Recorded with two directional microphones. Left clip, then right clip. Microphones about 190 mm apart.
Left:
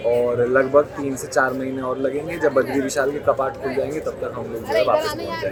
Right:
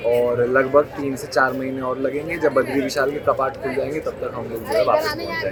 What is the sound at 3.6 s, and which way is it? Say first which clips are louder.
Speech: even; 15° left (ahead or behind).